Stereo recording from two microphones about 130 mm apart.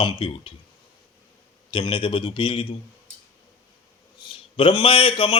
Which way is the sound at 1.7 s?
40° left (ahead or behind).